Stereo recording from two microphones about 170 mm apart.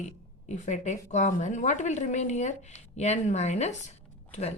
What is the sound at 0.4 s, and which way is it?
A woman's voice, 45° left (ahead or behind).